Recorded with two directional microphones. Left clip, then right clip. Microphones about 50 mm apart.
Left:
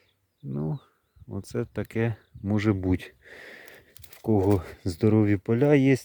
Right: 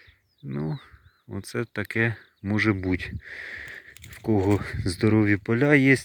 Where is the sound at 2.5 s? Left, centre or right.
Left.